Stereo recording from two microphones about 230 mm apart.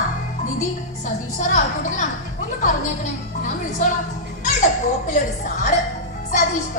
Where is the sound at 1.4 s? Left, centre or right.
Left.